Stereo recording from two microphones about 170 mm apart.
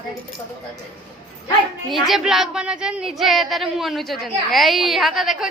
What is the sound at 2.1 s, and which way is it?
Speech, centre (ahead or behind).